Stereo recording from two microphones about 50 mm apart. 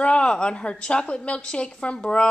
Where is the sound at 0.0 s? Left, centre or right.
Left.